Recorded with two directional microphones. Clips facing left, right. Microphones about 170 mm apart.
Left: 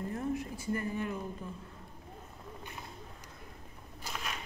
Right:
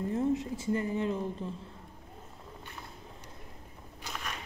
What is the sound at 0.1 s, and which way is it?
Speech, 20° right (ahead or behind).